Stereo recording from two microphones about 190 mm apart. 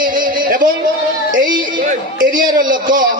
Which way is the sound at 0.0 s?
45° right (ahead or behind).